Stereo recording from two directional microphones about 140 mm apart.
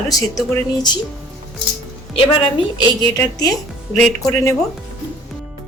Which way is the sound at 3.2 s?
25° left (ahead or behind).